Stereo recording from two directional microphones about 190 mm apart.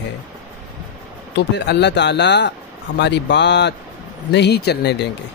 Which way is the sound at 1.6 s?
65° left (ahead or behind).